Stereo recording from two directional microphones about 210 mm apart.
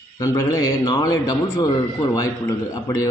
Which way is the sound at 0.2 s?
15° left (ahead or behind).